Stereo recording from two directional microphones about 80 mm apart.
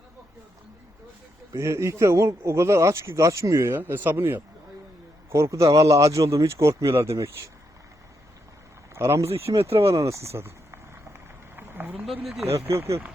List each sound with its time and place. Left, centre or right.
1.5 s a man's voice: right
3.8 s a man's voice: right
9.0 s speech: right
12.0 s speech: centre
12.6 s a man's voice: right